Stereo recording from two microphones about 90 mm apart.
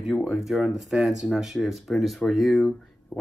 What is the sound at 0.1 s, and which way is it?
Speech, 15° right (ahead or behind).